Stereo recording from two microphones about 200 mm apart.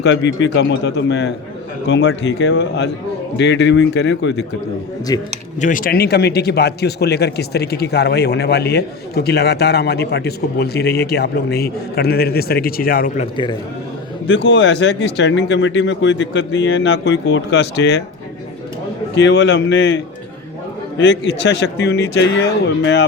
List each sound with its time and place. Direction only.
0.0 s speech: 60° left (ahead or behind)
5.1 s speech: 20° left (ahead or behind)
5.5 s speech: 40° left (ahead or behind)
13.3 s speech: 25° left (ahead or behind)
14.3 s speech: 65° left (ahead or behind)
19.1 s speech: 65° left (ahead or behind)
21.0 s speech: 65° left (ahead or behind)